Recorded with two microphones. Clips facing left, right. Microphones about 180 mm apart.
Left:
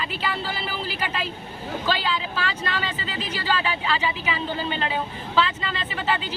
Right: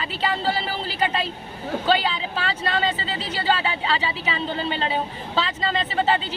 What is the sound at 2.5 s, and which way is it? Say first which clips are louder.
Speech: right 4 dB; 30° right (ahead or behind).